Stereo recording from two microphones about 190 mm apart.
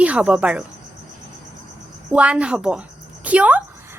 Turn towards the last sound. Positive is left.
turn(degrees=-10)  # may be behind; listen again after turning